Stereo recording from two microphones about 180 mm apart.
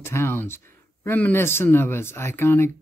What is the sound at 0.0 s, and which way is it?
Speech, 15° left (ahead or behind).